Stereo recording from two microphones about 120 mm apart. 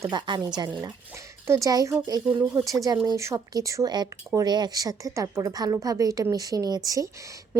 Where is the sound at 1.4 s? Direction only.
20° right (ahead or behind).